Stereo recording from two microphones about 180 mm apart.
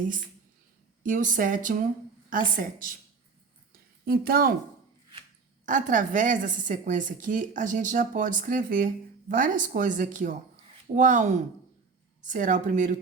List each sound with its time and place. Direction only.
1.0 s a woman's voice: 45° right (ahead or behind)
4.0 s a woman's voice: 55° right (ahead or behind)
5.6 s a woman's voice: 45° right (ahead or behind)